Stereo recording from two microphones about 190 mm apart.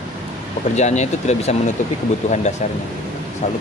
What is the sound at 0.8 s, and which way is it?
Speech, 35° left (ahead or behind).